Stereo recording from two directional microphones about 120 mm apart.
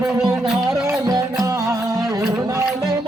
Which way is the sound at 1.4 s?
25° right (ahead or behind).